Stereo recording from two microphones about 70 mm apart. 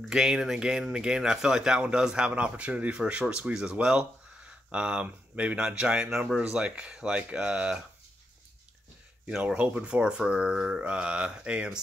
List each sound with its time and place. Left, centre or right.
0.1 s speech: centre
9.4 s speech: centre